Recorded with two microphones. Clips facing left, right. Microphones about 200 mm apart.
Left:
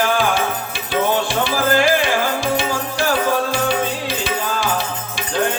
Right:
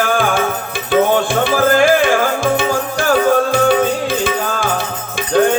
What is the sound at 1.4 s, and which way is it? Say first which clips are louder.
Music: right 4 dB; 50° right (ahead or behind).